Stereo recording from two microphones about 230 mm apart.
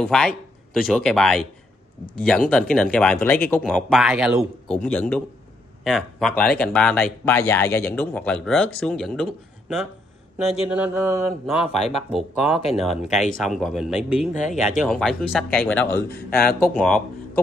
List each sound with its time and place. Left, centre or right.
0.0 s speech: centre
10.6 s a sound: centre
11.4 s speech: centre
16.1 s a man's voice: left
16.6 s speech: centre